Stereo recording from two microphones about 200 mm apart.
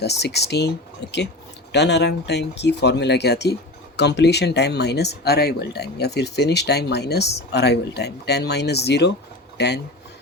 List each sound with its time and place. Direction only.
0.0 s speech: 55° left (ahead or behind)
1.7 s speech: 60° left (ahead or behind)